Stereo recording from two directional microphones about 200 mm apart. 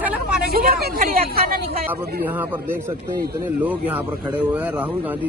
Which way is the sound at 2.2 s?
10° right (ahead or behind).